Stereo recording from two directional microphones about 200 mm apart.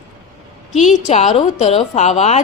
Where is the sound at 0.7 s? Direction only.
35° left (ahead or behind).